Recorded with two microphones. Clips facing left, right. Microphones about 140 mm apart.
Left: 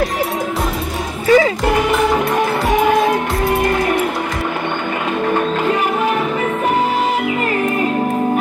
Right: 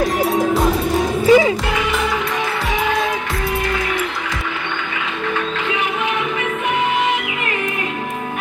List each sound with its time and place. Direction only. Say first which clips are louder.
1.2 s music: even; 15° right (ahead or behind)
2.7 s music: left 6 dB; 50° left (ahead or behind)